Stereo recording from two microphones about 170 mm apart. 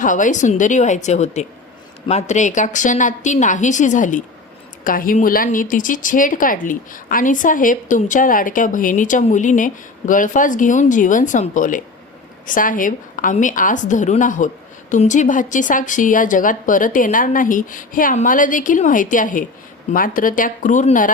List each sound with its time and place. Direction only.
0.0 s a woman's voice: 50° left (ahead or behind)